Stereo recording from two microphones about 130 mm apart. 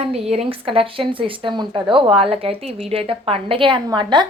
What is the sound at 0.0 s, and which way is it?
A woman's voice, 55° right (ahead or behind).